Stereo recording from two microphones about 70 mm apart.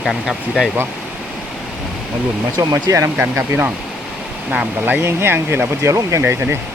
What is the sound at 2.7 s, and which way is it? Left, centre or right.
Speech, right.